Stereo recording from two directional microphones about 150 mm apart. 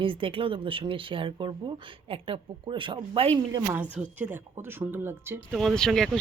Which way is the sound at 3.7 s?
10° right (ahead or behind).